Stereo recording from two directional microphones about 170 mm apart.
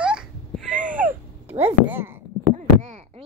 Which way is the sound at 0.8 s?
50° right (ahead or behind).